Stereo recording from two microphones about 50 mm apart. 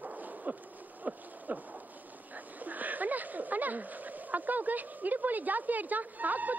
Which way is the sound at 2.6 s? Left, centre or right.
Right.